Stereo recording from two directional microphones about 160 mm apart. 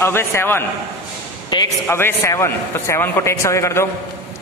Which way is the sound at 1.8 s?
15° left (ahead or behind).